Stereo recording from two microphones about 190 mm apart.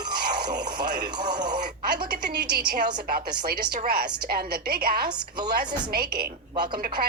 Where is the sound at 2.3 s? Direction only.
60° right (ahead or behind).